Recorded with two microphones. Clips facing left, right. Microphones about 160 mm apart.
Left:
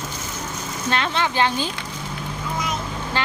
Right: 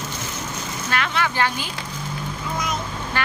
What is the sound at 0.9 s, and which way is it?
Speech, 25° left (ahead or behind).